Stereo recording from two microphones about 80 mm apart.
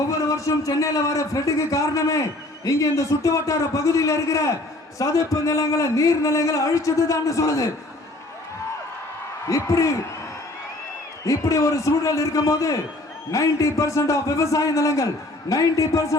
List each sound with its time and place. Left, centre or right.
0.3 s a man's voice: left
9.5 s speech: left
11.3 s a man's voice: left